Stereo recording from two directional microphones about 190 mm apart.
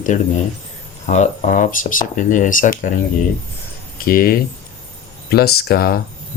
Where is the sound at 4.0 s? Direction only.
50° left (ahead or behind).